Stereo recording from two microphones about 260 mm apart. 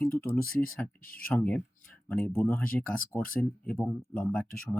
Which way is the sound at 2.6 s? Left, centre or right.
Left.